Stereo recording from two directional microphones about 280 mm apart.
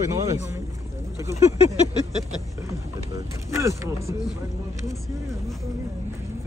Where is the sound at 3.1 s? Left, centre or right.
Centre.